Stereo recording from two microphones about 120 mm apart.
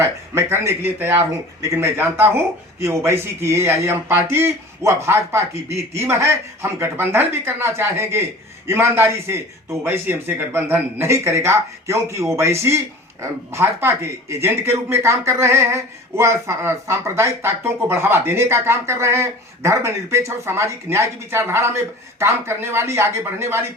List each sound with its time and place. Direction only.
0.0 s speech: 20° right (ahead or behind)